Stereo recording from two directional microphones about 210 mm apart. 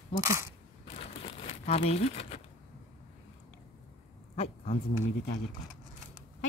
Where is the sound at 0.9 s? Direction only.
30° left (ahead or behind).